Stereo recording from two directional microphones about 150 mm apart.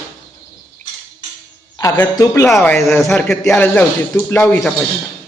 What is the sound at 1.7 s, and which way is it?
Speech, 25° left (ahead or behind).